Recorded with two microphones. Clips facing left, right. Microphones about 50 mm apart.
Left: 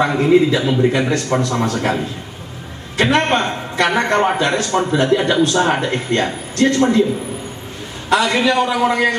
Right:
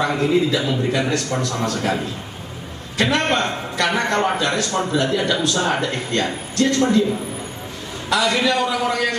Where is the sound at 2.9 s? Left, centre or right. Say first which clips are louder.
Left 4 dB; left.